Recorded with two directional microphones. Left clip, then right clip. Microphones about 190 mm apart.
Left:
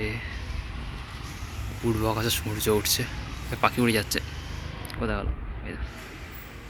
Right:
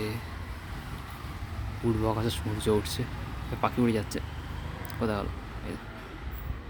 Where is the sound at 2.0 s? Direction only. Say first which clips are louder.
Left 3 dB; 10° right (ahead or behind).